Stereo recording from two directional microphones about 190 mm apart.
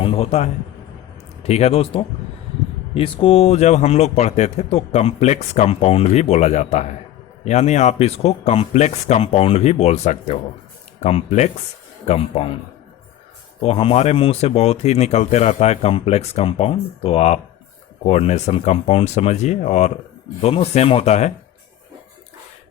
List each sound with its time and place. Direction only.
0.0 s a man's voice: 30° left (ahead or behind)
13.6 s speech: 30° left (ahead or behind)